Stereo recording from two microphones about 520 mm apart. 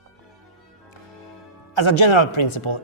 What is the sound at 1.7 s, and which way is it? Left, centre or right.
A woman's voice, left.